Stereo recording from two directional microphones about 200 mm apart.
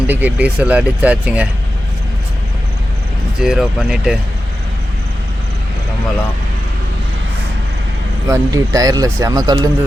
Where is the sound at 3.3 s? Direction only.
Centre (ahead or behind).